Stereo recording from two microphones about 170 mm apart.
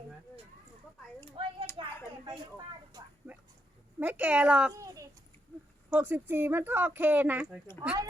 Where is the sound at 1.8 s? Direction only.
30° right (ahead or behind).